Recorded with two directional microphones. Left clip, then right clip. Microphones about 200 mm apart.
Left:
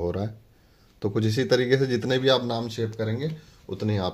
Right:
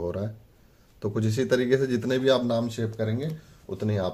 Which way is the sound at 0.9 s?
35° left (ahead or behind).